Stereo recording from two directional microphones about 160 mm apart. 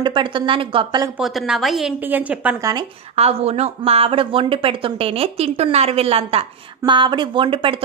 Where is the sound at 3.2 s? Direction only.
40° right (ahead or behind).